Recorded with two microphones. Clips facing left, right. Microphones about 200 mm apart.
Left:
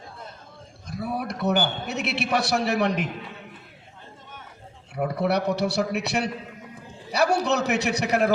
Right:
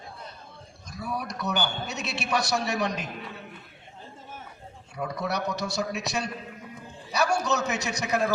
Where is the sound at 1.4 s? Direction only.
55° left (ahead or behind).